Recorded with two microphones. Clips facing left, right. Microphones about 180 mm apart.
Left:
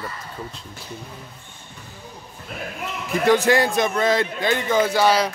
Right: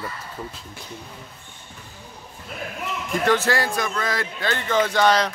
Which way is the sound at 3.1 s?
15° left (ahead or behind).